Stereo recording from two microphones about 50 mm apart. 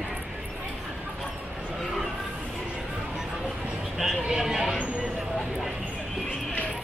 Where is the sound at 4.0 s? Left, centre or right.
Centre.